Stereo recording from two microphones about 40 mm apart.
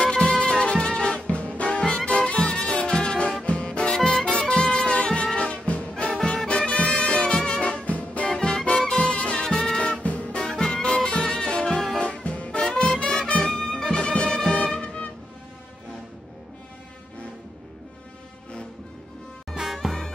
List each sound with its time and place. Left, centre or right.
0.0 s music: left
11.7 s music: centre
12.1 s music: left
13.6 s music: centre
19.5 s music: centre